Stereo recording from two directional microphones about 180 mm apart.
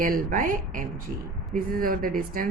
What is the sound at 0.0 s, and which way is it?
Speech, 50° right (ahead or behind).